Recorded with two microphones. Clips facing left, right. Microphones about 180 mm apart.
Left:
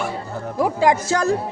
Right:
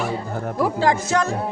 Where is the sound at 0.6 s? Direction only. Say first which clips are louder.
Left 2 dB; 15° left (ahead or behind).